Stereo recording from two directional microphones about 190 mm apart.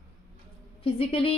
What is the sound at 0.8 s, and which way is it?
Speech, 30° left (ahead or behind).